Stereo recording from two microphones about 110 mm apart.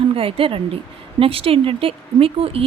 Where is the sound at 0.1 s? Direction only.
55° right (ahead or behind).